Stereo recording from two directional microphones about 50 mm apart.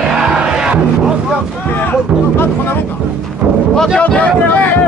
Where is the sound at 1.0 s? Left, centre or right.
Centre.